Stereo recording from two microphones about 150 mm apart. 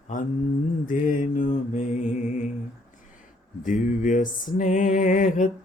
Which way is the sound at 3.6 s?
55° left (ahead or behind).